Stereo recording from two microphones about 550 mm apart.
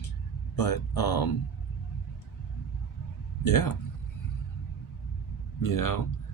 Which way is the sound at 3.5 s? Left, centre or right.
Left.